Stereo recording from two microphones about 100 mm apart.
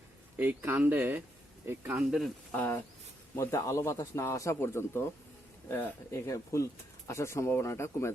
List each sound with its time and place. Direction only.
0.3 s speech: 20° right (ahead or behind)
2.0 s speech: centre (ahead or behind)
2.5 s a man's voice: 20° left (ahead or behind)